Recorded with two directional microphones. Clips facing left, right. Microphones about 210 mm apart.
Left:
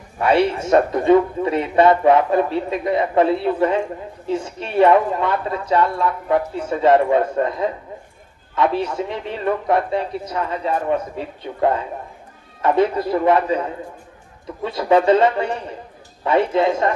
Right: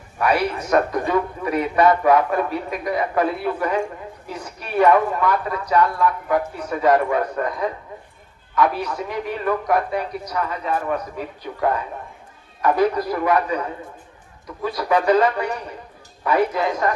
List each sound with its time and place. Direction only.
0.2 s a man's voice: 25° left (ahead or behind)